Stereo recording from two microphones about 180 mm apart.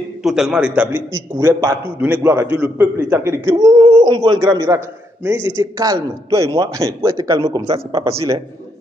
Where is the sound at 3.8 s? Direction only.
25° right (ahead or behind).